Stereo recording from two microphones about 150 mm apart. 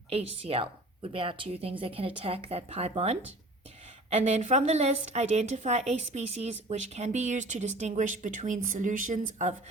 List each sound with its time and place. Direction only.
0.1 s a woman's voice: 40° right (ahead or behind)